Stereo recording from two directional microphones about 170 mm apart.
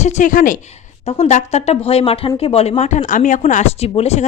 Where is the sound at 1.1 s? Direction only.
40° left (ahead or behind).